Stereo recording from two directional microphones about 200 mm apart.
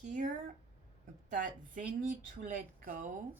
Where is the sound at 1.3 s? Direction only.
40° right (ahead or behind).